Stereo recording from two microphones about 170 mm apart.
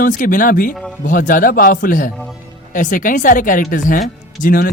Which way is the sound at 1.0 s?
50° left (ahead or behind).